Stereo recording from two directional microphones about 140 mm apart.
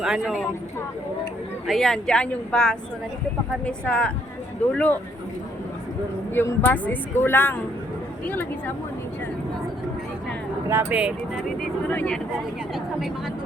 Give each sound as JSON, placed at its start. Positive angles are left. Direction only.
{"t": 0.0, "sound": "speech", "side_deg": 0}
{"t": 1.6, "sound": "a woman's voice", "side_deg": 0}
{"t": 6.3, "sound": "a woman's voice", "side_deg": 15}
{"t": 10.7, "sound": "speech", "side_deg": -15}
{"t": 11.9, "sound": "a woman's voice", "side_deg": 10}
{"t": 12.7, "sound": "speech", "side_deg": 0}